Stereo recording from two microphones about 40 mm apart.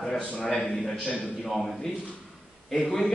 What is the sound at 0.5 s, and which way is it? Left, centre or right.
Speech, centre.